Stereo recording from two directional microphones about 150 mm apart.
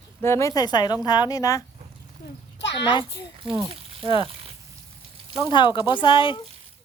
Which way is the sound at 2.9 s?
30° left (ahead or behind).